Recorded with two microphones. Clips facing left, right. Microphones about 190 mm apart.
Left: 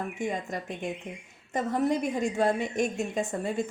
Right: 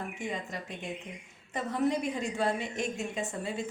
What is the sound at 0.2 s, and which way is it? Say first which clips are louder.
Speech: left 6 dB; 45° left (ahead or behind).